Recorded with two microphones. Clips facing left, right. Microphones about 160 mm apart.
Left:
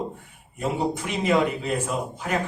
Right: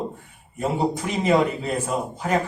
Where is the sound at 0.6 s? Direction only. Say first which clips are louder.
Right 2 dB; 35° right (ahead or behind).